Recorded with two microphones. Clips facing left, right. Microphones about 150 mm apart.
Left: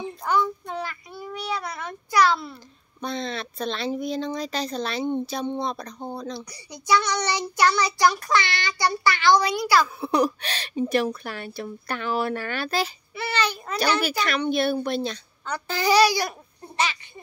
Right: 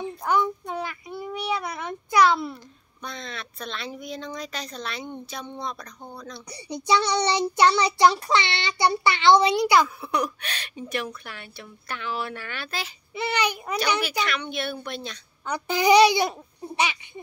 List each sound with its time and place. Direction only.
0.2 s child singing: 15° right (ahead or behind)
1.1 s a sound: 20° right (ahead or behind)
1.5 s a child's voice: 5° right (ahead or behind)
3.0 s speech: 30° left (ahead or behind)
6.5 s child singing: 25° right (ahead or behind)
9.9 s speech: 30° left (ahead or behind)
13.1 s a child's voice: 15° right (ahead or behind)
14.0 s speech: 40° left (ahead or behind)
15.4 s a child's voice: 15° right (ahead or behind)